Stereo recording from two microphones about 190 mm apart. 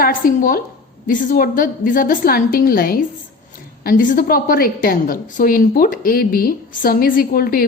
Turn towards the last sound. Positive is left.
turn(degrees=50)  # may be behind; listen again after turning